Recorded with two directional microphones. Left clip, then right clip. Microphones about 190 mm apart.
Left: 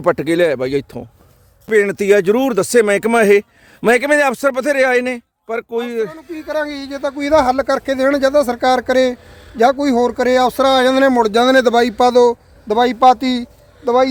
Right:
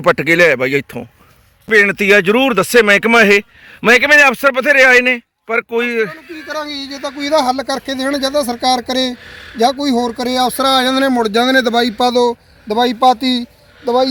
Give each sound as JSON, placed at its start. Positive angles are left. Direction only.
{"t": 0.0, "sound": "speech", "side_deg": -5}
{"t": 6.5, "sound": "speech", "side_deg": 45}
{"t": 9.2, "sound": "speech", "side_deg": -5}
{"t": 9.6, "sound": "speech", "side_deg": 25}